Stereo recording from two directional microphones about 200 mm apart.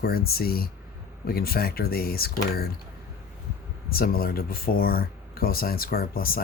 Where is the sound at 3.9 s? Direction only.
45° left (ahead or behind).